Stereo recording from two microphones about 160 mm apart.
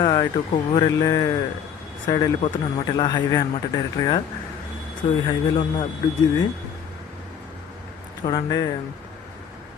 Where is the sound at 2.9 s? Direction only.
35° left (ahead or behind).